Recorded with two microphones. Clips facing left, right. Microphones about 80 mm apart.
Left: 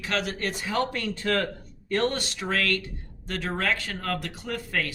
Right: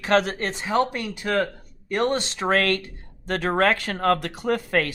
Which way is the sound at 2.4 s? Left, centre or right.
Right.